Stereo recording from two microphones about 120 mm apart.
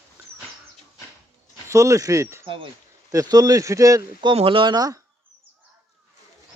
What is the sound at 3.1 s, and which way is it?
Speech, 30° right (ahead or behind).